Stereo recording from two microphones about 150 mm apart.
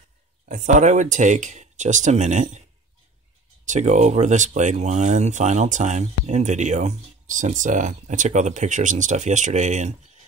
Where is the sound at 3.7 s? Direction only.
50° right (ahead or behind).